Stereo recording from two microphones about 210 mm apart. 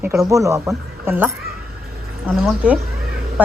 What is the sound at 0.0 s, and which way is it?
A woman's voice, 10° right (ahead or behind).